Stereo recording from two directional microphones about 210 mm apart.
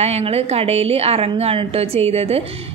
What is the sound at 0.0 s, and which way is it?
A woman's voice, 30° right (ahead or behind).